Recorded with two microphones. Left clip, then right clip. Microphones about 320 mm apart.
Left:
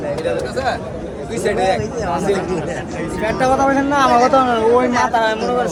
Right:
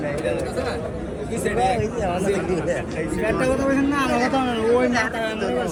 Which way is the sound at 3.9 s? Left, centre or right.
Left.